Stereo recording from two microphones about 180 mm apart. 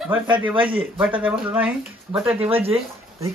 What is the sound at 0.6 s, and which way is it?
Speech, 30° right (ahead or behind).